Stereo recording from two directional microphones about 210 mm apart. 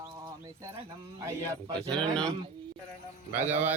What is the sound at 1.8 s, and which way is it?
Speech, 5° left (ahead or behind).